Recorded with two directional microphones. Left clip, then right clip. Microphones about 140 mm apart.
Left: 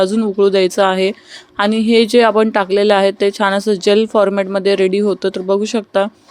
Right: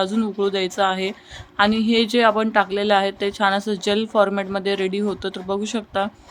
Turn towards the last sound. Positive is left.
turn(degrees=45)  # may be behind; listen again after turning